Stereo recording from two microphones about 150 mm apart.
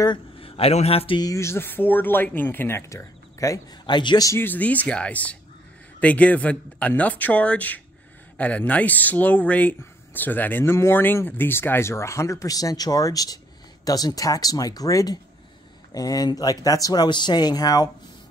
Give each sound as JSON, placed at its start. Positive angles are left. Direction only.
{"t": 0.0, "sound": "speech", "side_deg": 35}